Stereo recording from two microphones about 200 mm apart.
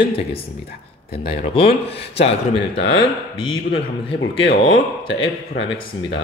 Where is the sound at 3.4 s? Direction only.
25° left (ahead or behind).